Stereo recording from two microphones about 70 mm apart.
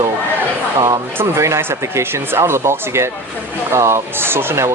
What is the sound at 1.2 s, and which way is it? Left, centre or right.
Speech, right.